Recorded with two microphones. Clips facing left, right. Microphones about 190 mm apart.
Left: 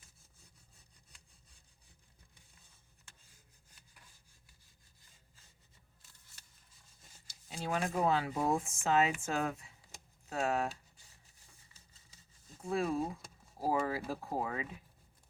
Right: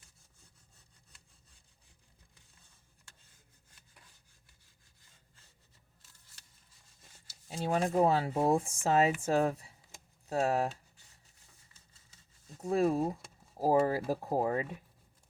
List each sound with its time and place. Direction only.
7.5 s speech: 35° right (ahead or behind)
12.6 s speech: 40° right (ahead or behind)